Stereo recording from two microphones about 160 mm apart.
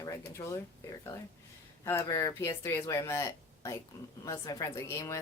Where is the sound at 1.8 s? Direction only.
15° left (ahead or behind).